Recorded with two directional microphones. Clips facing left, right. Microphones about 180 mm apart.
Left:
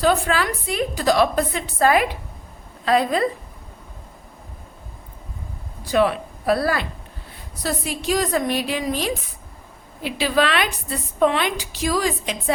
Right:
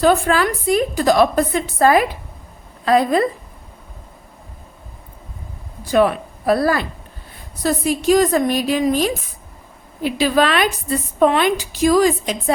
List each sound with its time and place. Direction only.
0.0 s a woman's voice: 50° right (ahead or behind)
5.9 s a woman's voice: 50° right (ahead or behind)